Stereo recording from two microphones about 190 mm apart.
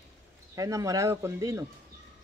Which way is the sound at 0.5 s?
15° right (ahead or behind).